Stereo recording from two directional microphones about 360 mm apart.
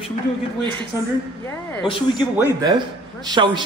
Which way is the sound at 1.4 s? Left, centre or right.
Centre.